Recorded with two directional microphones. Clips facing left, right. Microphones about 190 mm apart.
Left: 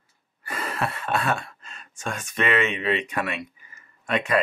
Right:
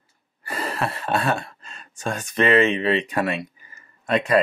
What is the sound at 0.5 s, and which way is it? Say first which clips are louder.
Speech: right 2 dB; 35° right (ahead or behind).